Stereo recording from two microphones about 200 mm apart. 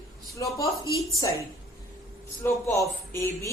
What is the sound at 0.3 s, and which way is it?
Speech, 15° left (ahead or behind).